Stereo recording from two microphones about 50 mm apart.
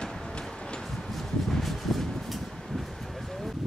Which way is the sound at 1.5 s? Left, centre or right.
Centre.